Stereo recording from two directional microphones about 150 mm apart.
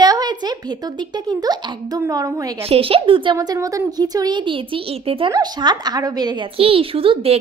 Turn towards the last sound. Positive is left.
turn(degrees=-40)  # may be behind; listen again after turning